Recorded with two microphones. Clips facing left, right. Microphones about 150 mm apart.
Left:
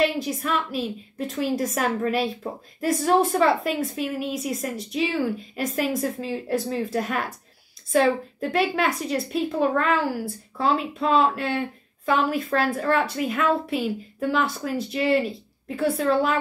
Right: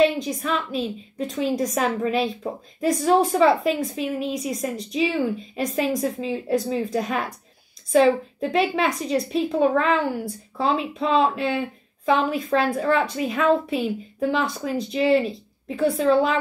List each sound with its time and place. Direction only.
0.0 s a woman's voice: centre (ahead or behind)